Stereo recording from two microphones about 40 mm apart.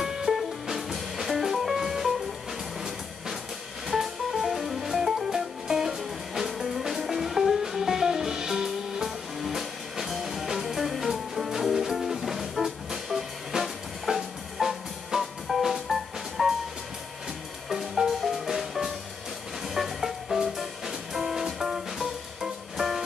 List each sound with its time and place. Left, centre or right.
0.3 s music: centre
3.8 s music: centre
17.6 s music: centre